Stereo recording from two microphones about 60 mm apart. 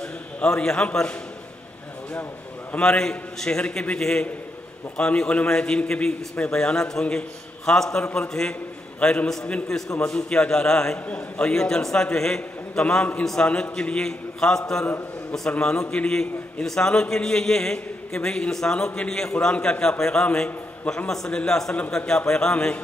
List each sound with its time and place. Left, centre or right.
0.0 s a man's voice: centre
2.8 s a man's voice: centre
13.2 s a man's voice: centre
13.5 s a man's voice: centre
15.6 s a man's voice: centre